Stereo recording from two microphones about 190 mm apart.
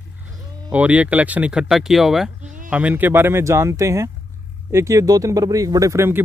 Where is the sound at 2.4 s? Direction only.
40° right (ahead or behind).